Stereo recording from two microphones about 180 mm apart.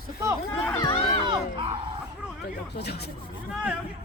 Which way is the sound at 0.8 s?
35° left (ahead or behind).